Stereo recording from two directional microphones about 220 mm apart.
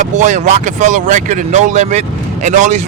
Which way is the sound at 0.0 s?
35° right (ahead or behind).